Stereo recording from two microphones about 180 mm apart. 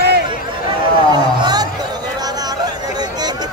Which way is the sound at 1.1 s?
20° right (ahead or behind).